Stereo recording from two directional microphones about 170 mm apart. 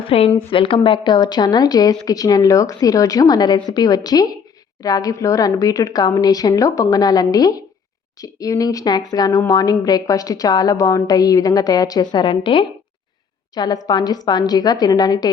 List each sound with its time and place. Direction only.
0.0 s a woman's voice: 35° left (ahead or behind)